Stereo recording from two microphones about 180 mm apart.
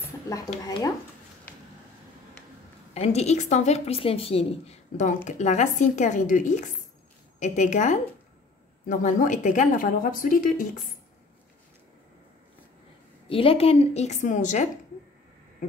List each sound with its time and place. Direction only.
0.7 s speech: 20° left (ahead or behind)
2.9 s a woman's voice: 35° left (ahead or behind)
13.3 s a woman's voice: 30° left (ahead or behind)